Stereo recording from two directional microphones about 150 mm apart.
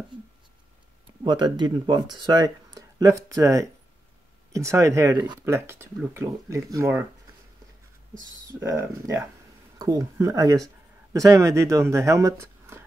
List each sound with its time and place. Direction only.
1.2 s speech: 30° right (ahead or behind)
5.4 s speech: 15° right (ahead or behind)
8.6 s speech: 20° right (ahead or behind)